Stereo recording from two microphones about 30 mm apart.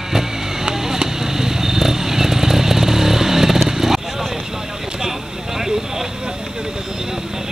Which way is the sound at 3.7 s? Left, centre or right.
Centre.